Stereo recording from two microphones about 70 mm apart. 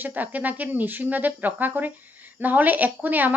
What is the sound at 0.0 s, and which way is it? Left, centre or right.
A woman's voice, right.